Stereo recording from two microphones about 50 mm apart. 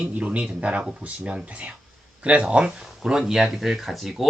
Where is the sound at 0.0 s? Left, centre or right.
Right.